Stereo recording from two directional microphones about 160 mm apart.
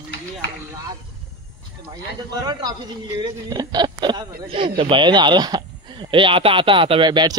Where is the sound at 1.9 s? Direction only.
25° right (ahead or behind).